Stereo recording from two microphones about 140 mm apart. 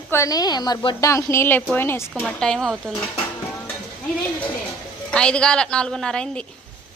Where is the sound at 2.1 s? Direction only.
5° left (ahead or behind).